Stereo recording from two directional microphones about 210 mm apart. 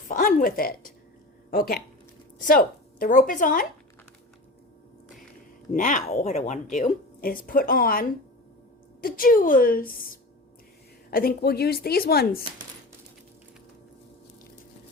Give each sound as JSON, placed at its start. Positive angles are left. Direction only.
{"t": 0.1, "sound": "a woman's voice", "side_deg": 40}
{"t": 5.7, "sound": "a woman's voice", "side_deg": 35}